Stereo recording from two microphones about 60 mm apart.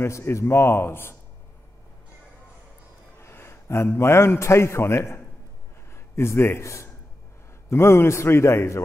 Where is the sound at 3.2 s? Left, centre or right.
Left.